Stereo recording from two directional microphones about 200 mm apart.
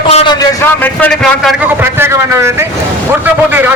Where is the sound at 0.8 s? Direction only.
5° left (ahead or behind).